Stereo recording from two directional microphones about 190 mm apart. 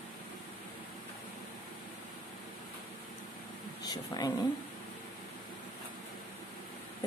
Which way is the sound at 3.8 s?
20° left (ahead or behind).